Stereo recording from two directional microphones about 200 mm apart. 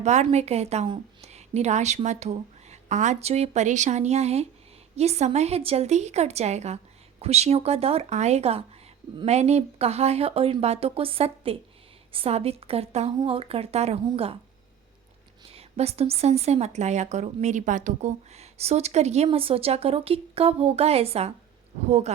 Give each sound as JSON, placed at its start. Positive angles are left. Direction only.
{"t": 0.0, "sound": "a woman's voice", "side_deg": -35}
{"t": 15.5, "sound": "a woman's voice", "side_deg": -30}